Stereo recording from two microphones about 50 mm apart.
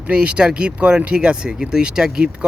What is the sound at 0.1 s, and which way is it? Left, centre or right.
Speech, right.